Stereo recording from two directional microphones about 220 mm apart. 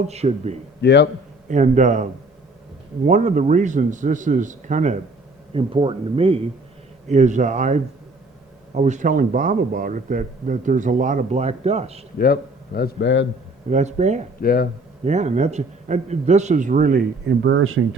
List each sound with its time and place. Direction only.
0.1 s speech: 30° right (ahead or behind)
0.8 s a man's voice: 50° left (ahead or behind)
1.5 s a man's voice: 35° right (ahead or behind)
3.1 s a man's voice: 35° right (ahead or behind)
12.2 s a man's voice: 45° left (ahead or behind)
13.7 s a man's voice: 30° right (ahead or behind)
14.4 s a man's voice: 45° left (ahead or behind)
15.0 s a man's voice: 30° right (ahead or behind); by 17.8 s 70° right (ahead or behind)